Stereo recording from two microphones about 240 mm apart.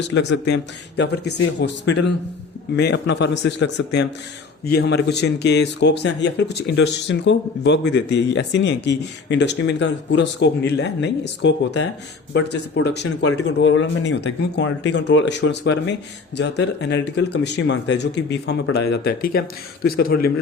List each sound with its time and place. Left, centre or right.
0.1 s speech: left